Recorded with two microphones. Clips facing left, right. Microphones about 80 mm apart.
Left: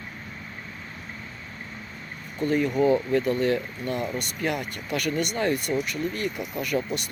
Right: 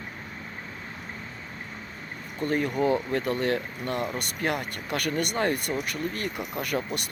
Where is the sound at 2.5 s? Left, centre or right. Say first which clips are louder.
Left 3 dB; right.